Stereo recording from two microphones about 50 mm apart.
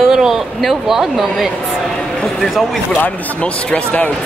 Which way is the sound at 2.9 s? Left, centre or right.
Left.